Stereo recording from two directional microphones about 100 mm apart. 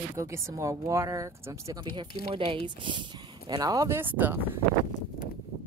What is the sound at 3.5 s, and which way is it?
Speech, 40° right (ahead or behind).